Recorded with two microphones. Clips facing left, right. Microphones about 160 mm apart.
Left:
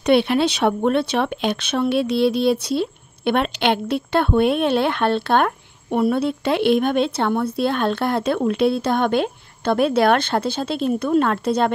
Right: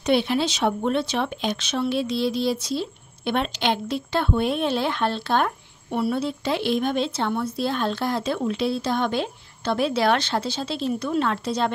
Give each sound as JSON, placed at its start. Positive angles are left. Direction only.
{"t": 0.0, "sound": "speech", "side_deg": 65}